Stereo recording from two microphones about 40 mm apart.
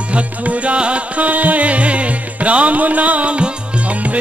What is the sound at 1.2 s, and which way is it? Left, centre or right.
Music, right.